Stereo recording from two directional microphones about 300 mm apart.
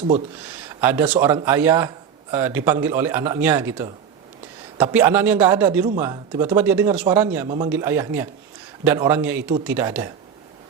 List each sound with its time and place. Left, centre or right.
0.8 s a man's voice: centre
7.4 s a man's voice: centre